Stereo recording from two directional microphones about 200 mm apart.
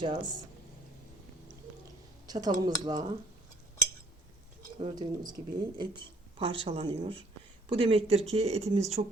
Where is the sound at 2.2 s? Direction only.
20° right (ahead or behind).